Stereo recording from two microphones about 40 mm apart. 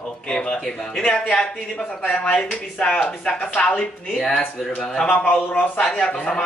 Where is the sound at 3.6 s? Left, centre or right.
Left.